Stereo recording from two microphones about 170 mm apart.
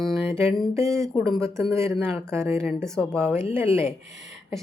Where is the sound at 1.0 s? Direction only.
15° right (ahead or behind).